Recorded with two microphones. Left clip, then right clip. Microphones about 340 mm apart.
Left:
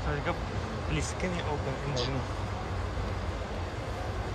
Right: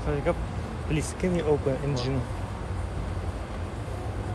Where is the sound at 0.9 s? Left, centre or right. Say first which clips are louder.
Right 6 dB; centre.